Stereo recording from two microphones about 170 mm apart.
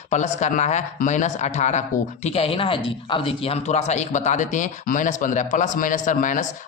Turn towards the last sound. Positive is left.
turn(degrees=50)  # may be behind; listen again after turning